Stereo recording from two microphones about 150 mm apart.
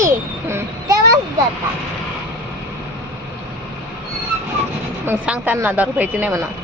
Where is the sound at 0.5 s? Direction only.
20° right (ahead or behind).